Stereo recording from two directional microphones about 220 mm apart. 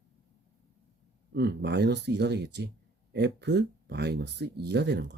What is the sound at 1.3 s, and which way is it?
Speech, 50° right (ahead or behind).